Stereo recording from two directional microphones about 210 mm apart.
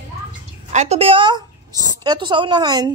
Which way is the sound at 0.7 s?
30° right (ahead or behind).